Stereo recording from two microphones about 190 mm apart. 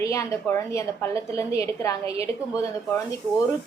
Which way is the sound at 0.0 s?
15° left (ahead or behind).